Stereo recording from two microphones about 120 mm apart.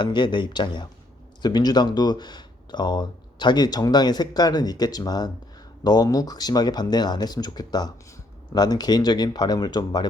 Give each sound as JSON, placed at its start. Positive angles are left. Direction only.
{"t": 0.0, "sound": "speech", "side_deg": 40}